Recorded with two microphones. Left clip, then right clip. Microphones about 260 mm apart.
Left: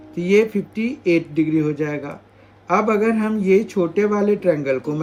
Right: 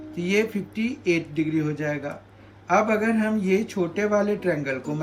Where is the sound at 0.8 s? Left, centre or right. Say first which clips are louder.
Left 5 dB; left.